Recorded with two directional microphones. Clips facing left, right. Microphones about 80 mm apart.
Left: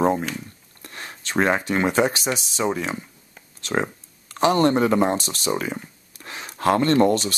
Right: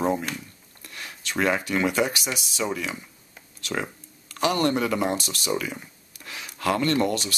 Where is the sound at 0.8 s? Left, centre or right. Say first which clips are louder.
Left 2 dB; left.